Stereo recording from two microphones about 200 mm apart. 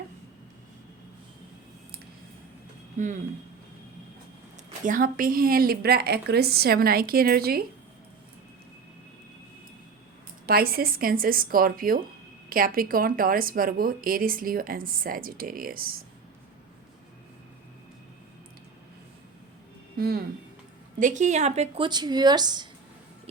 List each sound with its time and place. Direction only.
4.9 s speech: 45° right (ahead or behind)
10.4 s speech: 50° right (ahead or behind)
20.0 s speech: 50° right (ahead or behind)
21.0 s a woman's voice: 40° right (ahead or behind); by 22.7 s 20° right (ahead or behind)